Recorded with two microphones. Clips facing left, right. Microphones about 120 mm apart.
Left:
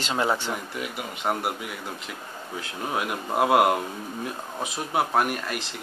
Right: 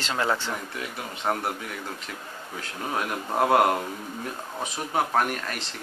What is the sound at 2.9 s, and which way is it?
A man's voice, 5° left (ahead or behind).